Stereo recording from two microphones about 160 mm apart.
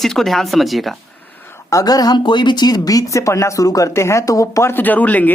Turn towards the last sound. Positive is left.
turn(degrees=10)  # may be behind; listen again after turning